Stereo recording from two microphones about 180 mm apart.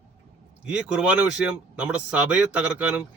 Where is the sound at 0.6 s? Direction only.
5° right (ahead or behind).